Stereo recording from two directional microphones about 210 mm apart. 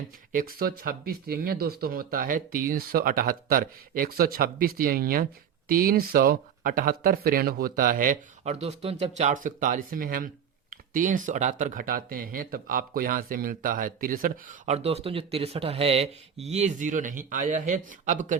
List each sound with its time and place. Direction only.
0.3 s speech: 45° right (ahead or behind)